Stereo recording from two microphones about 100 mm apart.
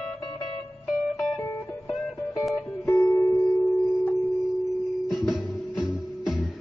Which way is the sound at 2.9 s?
30° left (ahead or behind).